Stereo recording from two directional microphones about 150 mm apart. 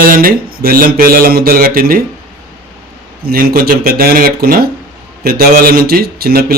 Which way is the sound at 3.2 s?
85° right.